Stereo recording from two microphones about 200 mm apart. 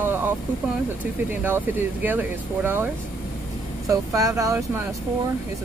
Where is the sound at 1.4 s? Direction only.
10° right (ahead or behind).